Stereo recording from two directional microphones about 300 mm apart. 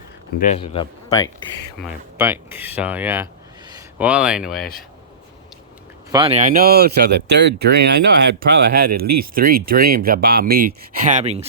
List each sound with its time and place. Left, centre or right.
0.3 s speech: left
1.8 s speech: centre
6.1 s speech: centre
9.0 s speech: right
9.3 s speech: right